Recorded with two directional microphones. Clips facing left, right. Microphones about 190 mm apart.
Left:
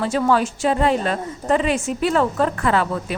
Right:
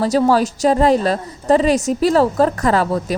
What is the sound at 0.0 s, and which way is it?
A woman's voice, 35° right (ahead or behind).